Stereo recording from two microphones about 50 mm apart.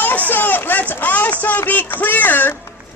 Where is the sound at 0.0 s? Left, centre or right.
Left.